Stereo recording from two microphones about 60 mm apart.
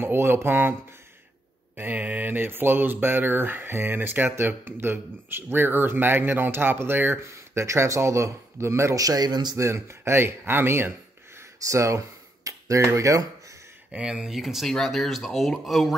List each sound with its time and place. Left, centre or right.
0.0 s speech: right
7.5 s speech: right
8.9 s a man's voice: right
9.7 s speech: right
11.3 s a sound: right
13.9 s speech: centre